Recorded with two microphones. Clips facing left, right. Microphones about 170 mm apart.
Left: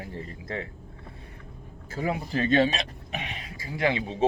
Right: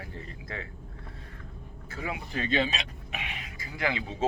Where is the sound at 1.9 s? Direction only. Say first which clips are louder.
Left 6 dB; 35° left (ahead or behind).